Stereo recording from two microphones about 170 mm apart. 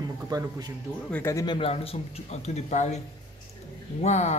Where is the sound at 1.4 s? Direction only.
30° left (ahead or behind).